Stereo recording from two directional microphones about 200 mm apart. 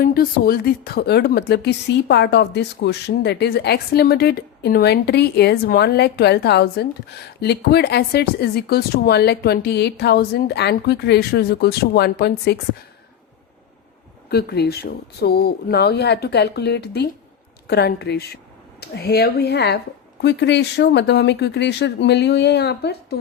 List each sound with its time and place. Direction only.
0.0 s a woman's voice: 45° left (ahead or behind)
14.3 s a woman's voice: 55° left (ahead or behind)